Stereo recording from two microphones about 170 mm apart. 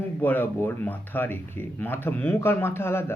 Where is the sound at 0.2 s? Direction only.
10° left (ahead or behind).